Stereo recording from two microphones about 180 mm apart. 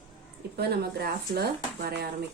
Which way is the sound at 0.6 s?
65° right (ahead or behind).